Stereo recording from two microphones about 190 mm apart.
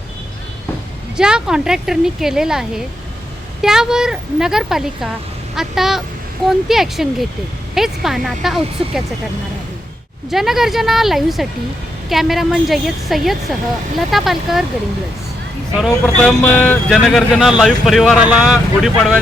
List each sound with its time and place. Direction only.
1.1 s speech: 5° right (ahead or behind)
10.3 s speech: centre (ahead or behind)
15.8 s speech: 5° left (ahead or behind)